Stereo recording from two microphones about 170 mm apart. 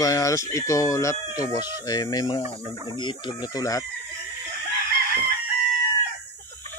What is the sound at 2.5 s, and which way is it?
Speech, 30° left (ahead or behind).